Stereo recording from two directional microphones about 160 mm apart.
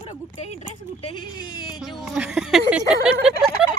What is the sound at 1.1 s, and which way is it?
Speech, 25° left (ahead or behind).